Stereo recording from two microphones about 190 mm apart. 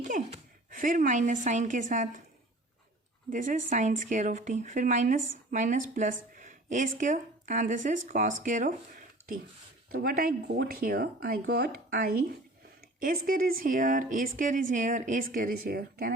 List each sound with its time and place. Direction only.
0.0 s a woman's voice: 45° right (ahead or behind)
3.2 s speech: 45° right (ahead or behind)
10.0 s speech: 50° right (ahead or behind)
13.2 s speech: 50° right (ahead or behind)